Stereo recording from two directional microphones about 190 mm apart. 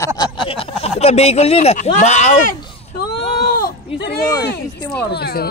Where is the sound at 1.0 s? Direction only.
35° left (ahead or behind).